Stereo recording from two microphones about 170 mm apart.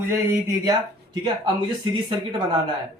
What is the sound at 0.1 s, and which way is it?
Speech, 15° right (ahead or behind).